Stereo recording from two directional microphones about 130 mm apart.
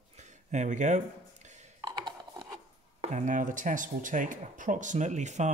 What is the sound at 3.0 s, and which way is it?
Speech, 65° right (ahead or behind).